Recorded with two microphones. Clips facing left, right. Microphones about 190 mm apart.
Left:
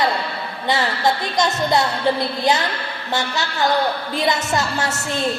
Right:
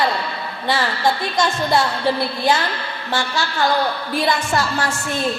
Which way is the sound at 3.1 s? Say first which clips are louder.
Right 1 dB; 20° left (ahead or behind).